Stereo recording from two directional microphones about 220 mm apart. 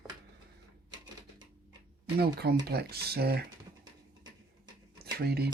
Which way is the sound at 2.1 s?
45° right (ahead or behind).